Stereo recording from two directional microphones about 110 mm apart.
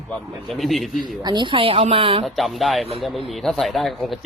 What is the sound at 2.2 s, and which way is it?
A man's voice, centre (ahead or behind).